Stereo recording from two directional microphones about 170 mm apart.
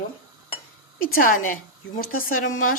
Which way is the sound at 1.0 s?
55° left (ahead or behind).